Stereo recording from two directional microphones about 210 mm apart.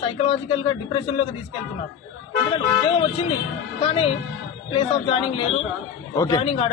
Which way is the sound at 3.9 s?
25° left (ahead or behind).